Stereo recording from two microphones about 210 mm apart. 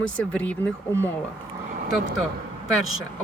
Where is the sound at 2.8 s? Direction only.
70° left (ahead or behind).